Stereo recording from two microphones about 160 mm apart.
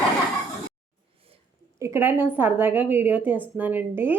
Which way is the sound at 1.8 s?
15° right (ahead or behind).